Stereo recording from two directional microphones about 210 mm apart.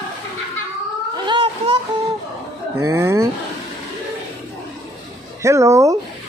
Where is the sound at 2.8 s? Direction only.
10° right (ahead or behind).